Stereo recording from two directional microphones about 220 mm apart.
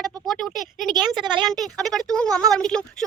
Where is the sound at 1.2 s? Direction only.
20° right (ahead or behind).